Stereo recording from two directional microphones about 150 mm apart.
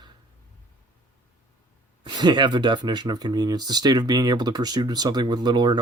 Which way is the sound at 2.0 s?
30° right (ahead or behind).